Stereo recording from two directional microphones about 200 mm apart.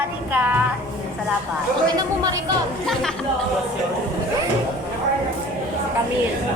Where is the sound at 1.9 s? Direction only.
15° right (ahead or behind).